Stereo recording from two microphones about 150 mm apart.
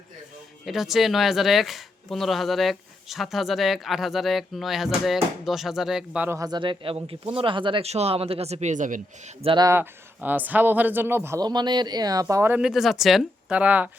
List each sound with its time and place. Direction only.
0.6 s speech: centre (ahead or behind)
6.2 s speech: 20° right (ahead or behind); by 9.3 s 55° right (ahead or behind)
9.4 s speech: 35° right (ahead or behind)
9.6 s speech: 15° right (ahead or behind)
12.5 s speech: 5° right (ahead or behind)